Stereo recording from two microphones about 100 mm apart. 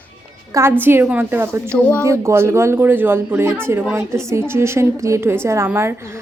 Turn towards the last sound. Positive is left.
turn(degrees=-25)  # may be behind; listen again after turning